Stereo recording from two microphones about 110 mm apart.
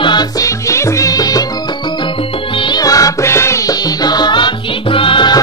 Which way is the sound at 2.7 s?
35° left (ahead or behind).